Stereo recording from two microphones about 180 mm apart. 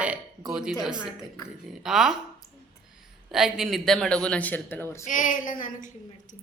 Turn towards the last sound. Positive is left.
turn(degrees=45)  # may be behind; listen again after turning